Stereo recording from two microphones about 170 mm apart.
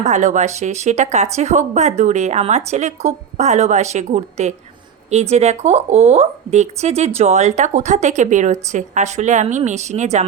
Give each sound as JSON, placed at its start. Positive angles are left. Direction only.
{"t": 0.0, "sound": "speech", "side_deg": -45}